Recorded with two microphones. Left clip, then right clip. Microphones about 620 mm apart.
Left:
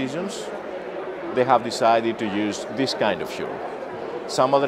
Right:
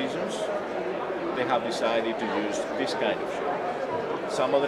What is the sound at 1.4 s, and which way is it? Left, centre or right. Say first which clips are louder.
Speech: left 9 dB; left.